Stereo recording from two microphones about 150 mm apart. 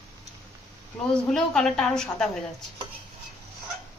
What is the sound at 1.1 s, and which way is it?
A woman's voice, 5° left (ahead or behind).